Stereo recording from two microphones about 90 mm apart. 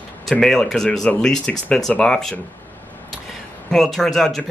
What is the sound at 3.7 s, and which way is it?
Speech, 5° left (ahead or behind).